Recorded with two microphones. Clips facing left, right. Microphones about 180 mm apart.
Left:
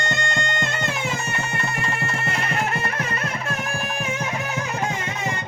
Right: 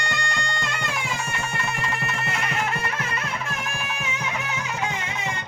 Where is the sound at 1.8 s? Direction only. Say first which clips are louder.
Left 2 dB; 25° left (ahead or behind).